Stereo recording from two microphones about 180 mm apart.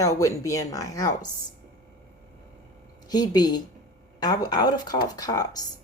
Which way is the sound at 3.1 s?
20° left (ahead or behind).